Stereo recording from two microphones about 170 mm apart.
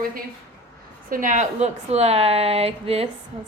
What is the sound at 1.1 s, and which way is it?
Speech, 50° right (ahead or behind).